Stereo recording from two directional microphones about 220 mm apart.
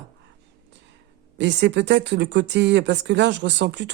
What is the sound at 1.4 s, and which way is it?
Speech, 50° right (ahead or behind).